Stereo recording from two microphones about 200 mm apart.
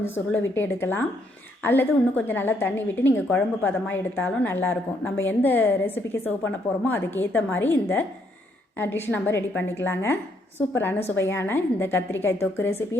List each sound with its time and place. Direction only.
0.0 s a woman's voice: 10° left (ahead or behind)